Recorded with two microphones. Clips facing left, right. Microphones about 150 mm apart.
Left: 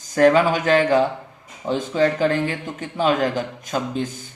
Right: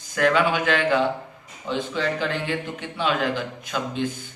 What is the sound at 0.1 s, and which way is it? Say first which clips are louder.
A man's voice: left 5 dB; 40° left (ahead or behind).